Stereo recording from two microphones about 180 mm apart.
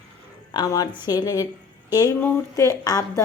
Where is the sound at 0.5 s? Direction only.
20° left (ahead or behind).